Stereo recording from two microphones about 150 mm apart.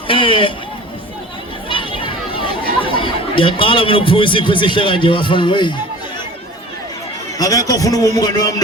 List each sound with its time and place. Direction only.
0.1 s a man's voice: 35° left (ahead or behind)
1.7 s a sound: 35° left (ahead or behind)
2.8 s a man's voice: 35° left (ahead or behind)
7.3 s a man's voice: 25° left (ahead or behind)